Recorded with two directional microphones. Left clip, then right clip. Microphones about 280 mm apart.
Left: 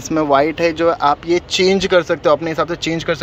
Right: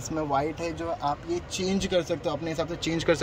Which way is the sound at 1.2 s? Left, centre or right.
Centre.